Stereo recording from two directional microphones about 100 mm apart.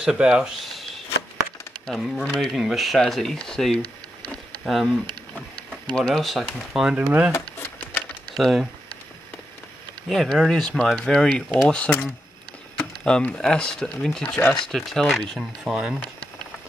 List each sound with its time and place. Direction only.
0.0 s speech: 5° right (ahead or behind)
1.9 s speech: 5° left (ahead or behind)
7.3 s a sound: 20° left (ahead or behind)
8.4 s speech: centre (ahead or behind)
10.0 s speech: centre (ahead or behind)